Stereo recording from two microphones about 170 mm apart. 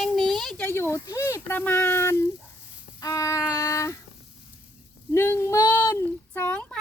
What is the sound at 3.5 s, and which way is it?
Speech, 15° left (ahead or behind).